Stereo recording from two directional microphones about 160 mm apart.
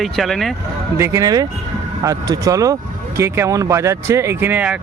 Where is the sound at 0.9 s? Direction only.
20° right (ahead or behind).